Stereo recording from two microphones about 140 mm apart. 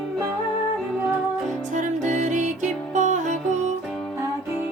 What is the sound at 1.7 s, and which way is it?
Music, 60° right (ahead or behind).